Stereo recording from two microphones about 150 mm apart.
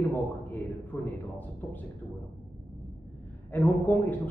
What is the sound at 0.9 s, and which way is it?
Speech, 15° left (ahead or behind).